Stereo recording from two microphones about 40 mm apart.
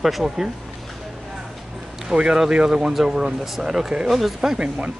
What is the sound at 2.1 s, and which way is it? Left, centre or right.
Speech, right.